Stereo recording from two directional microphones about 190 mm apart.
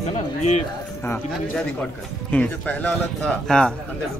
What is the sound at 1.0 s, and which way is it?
A man's voice, 5° left (ahead or behind).